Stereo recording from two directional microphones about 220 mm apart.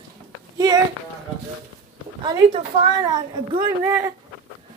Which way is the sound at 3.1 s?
20° right (ahead or behind).